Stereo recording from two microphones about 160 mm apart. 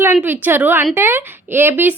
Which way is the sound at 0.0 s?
10° right (ahead or behind).